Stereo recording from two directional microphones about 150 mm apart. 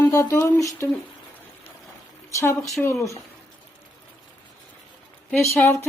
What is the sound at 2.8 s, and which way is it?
Speech, 10° left (ahead or behind).